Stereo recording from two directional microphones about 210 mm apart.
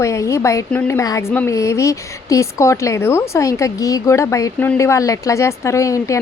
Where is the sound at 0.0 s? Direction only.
15° left (ahead or behind).